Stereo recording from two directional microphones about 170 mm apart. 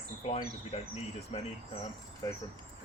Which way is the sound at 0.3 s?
35° left (ahead or behind).